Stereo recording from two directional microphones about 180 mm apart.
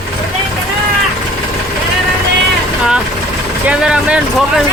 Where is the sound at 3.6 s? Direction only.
5° right (ahead or behind).